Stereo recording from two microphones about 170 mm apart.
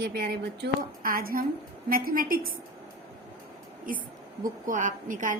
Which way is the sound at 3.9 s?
55° right (ahead or behind).